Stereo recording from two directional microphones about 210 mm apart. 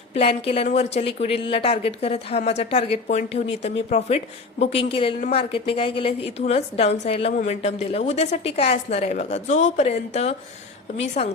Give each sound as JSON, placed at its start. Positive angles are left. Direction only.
{"t": 0.1, "sound": "a woman's voice", "side_deg": 30}